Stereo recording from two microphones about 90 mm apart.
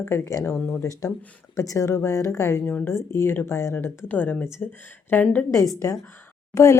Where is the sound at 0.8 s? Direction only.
40° left (ahead or behind).